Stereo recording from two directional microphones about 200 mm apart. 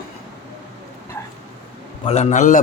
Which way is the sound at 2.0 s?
30° left (ahead or behind).